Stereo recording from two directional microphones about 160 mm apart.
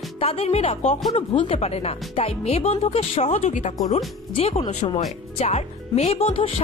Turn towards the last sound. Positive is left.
turn(degrees=35)  # may be behind; listen again after turning